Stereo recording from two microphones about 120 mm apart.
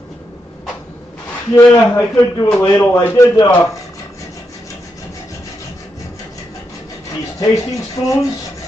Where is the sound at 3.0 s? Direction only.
20° left (ahead or behind).